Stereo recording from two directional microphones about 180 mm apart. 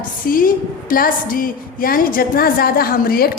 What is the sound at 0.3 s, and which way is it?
A woman's voice, 50° left (ahead or behind).